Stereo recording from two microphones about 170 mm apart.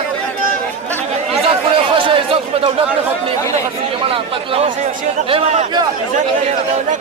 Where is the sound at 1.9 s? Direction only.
30° right (ahead or behind).